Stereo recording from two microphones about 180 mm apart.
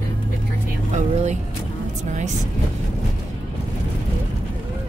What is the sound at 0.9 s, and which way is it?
Vehicle, 40° right (ahead or behind).